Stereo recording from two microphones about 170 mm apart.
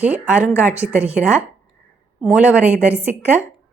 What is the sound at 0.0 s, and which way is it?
A woman's voice, 10° right (ahead or behind).